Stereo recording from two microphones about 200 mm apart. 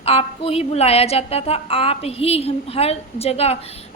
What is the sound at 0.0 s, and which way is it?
A woman's voice, 30° left (ahead or behind).